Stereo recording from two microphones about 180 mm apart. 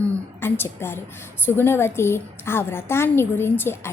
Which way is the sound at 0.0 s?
10° left (ahead or behind).